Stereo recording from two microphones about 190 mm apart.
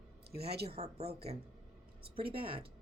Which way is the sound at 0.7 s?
35° right (ahead or behind).